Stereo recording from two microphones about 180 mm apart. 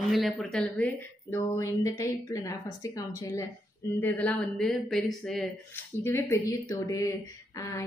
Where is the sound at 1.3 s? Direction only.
15° left (ahead or behind).